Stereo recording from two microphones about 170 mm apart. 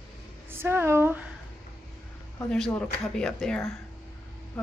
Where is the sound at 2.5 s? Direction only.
5° left (ahead or behind).